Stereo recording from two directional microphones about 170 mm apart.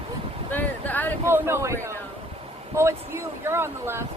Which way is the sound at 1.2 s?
15° right (ahead or behind).